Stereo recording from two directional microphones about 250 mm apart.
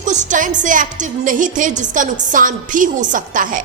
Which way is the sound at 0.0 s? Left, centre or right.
Right.